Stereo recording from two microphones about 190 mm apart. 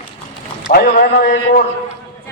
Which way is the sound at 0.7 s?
45° left (ahead or behind).